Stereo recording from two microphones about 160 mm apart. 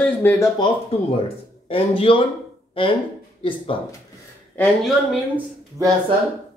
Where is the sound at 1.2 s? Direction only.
35° left (ahead or behind).